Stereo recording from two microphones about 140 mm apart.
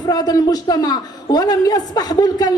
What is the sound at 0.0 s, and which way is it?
A woman's voice, 25° left (ahead or behind).